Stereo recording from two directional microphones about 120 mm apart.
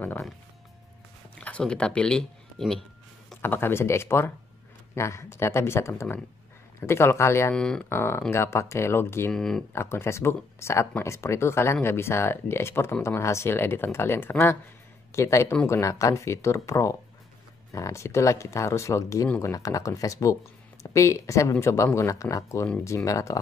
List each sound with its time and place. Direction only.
1.4 s speech: 10° left (ahead or behind)
3.4 s speech: 20° left (ahead or behind)
7.5 s speech: 5° left (ahead or behind)
7.9 s speech: 20° left (ahead or behind)
9.3 s speech: 5° left (ahead or behind)
9.7 s speech: 20° left (ahead or behind)